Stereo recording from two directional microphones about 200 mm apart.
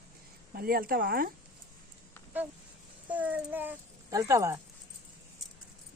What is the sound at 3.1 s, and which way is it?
Speech, 10° right (ahead or behind).